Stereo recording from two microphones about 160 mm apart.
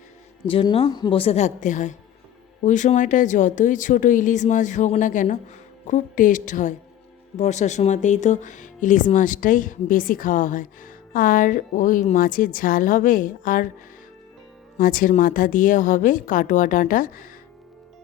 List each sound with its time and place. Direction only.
0.4 s a woman's voice: 35° left (ahead or behind); by 13.7 s 55° left (ahead or behind)
14.8 s speech: 60° left (ahead or behind)